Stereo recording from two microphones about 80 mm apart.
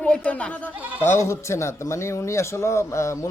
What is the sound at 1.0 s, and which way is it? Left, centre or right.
Speech, left.